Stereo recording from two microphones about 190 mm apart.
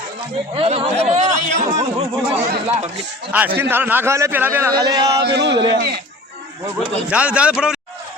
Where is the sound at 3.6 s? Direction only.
10° right (ahead or behind).